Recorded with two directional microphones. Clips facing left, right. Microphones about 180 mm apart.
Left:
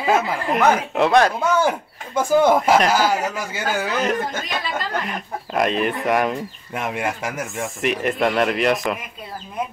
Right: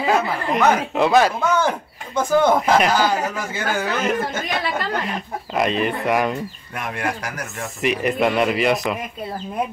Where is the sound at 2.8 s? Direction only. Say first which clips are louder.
Even; 10° left (ahead or behind).